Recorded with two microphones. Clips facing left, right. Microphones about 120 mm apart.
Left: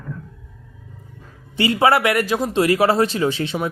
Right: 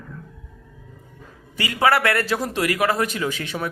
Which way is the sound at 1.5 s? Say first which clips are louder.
Left 3 dB; 25° left (ahead or behind).